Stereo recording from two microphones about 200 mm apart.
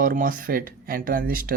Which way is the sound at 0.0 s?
45° right (ahead or behind).